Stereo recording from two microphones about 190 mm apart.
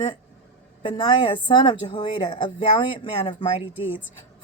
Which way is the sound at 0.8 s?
25° left (ahead or behind).